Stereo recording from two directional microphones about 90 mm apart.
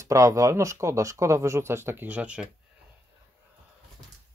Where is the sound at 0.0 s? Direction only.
35° right (ahead or behind); by 2.4 s 15° right (ahead or behind).